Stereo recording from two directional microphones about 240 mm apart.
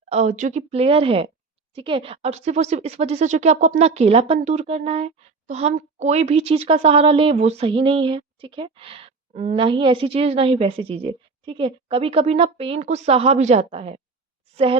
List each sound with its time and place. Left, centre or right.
0.1 s a woman's voice: right